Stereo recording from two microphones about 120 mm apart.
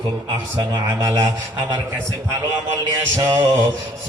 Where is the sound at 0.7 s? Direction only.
35° right (ahead or behind).